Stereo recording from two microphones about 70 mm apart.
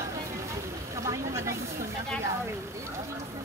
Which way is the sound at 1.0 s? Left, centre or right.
Right.